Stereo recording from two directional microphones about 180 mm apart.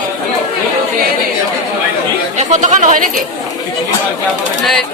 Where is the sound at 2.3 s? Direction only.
40° right (ahead or behind).